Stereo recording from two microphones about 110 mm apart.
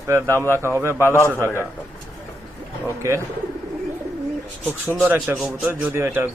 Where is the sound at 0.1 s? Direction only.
25° right (ahead or behind).